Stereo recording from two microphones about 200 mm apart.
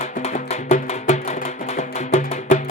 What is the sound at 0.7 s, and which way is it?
Music, 35° left (ahead or behind).